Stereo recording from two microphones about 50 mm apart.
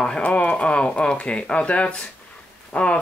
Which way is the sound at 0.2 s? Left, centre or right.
Left.